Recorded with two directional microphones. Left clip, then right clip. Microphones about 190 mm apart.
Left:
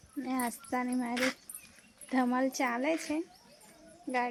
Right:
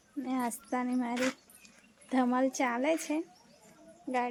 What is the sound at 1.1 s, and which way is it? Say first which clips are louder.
Speech: left 3 dB; 10° left (ahead or behind).